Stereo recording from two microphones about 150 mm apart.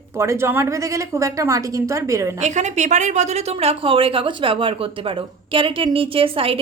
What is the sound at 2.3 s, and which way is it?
A woman's voice, 50° right (ahead or behind).